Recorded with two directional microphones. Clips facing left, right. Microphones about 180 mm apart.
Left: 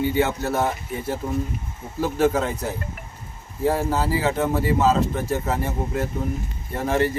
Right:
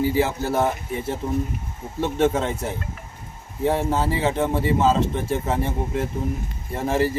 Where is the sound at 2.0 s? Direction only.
25° right (ahead or behind).